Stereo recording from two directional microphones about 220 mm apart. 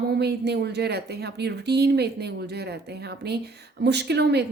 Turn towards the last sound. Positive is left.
turn(degrees=-50)  # may be behind; listen again after turning